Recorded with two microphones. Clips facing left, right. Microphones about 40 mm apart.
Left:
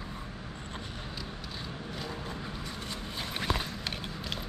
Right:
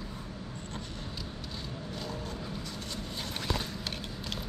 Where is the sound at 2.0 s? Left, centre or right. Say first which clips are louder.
Even; centre.